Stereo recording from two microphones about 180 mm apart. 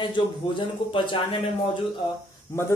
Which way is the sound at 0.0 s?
25° left (ahead or behind).